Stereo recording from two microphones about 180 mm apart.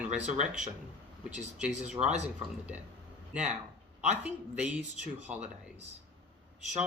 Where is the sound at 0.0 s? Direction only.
5° right (ahead or behind).